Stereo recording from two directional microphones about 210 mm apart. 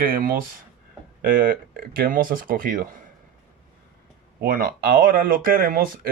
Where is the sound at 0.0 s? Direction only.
45° right (ahead or behind).